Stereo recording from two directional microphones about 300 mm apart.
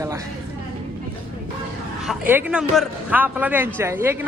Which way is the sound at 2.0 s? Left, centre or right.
Centre.